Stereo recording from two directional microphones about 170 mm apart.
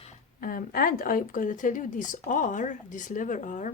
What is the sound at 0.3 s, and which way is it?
Speech, 55° left (ahead or behind).